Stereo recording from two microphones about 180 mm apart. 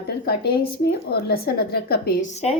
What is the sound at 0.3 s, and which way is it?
A woman's voice, 60° left (ahead or behind).